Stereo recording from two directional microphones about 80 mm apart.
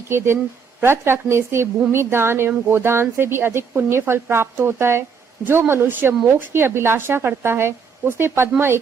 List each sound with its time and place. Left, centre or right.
0.1 s speech: right